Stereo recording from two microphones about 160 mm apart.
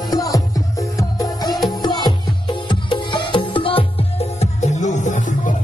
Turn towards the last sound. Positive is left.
turn(degrees=50)  # may be behind; listen again after turning